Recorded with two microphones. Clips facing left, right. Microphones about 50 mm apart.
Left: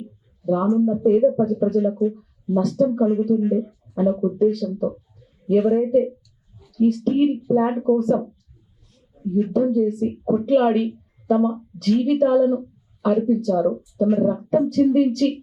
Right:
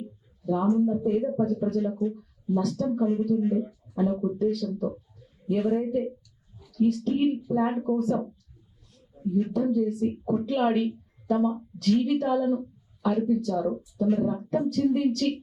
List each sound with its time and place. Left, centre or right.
0.4 s speech: centre
3.0 s speech: centre
5.5 s speech: centre
6.6 s a sound: centre
7.3 s a woman's voice: centre